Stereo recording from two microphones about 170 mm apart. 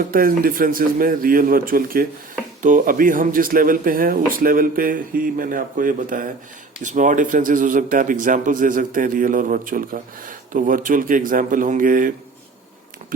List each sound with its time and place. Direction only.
0.0 s a man's voice: 55° right (ahead or behind)